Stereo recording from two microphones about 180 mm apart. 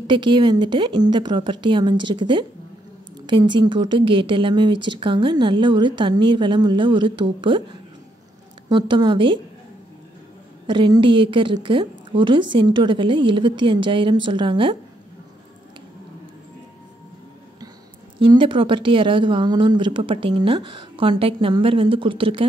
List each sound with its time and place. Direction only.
0.0 s speech: 25° right (ahead or behind)
10.7 s speech: 25° right (ahead or behind)
18.2 s speech: 25° right (ahead or behind)